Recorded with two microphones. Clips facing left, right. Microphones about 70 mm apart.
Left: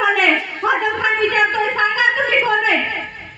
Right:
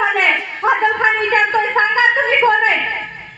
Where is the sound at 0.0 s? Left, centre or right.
Right.